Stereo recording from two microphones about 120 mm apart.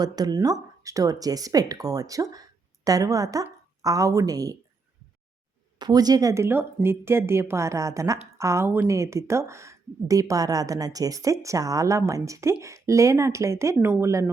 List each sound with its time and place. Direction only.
0.0 s a woman's voice: 35° right (ahead or behind)
5.8 s a woman's voice: 35° right (ahead or behind)